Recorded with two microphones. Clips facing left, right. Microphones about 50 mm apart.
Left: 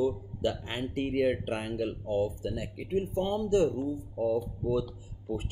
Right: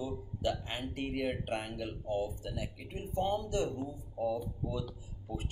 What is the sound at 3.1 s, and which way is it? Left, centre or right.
Speech, left.